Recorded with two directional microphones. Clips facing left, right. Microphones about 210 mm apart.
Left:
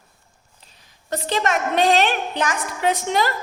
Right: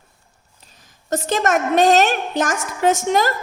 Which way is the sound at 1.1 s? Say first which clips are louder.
Right 3 dB; 45° right (ahead or behind).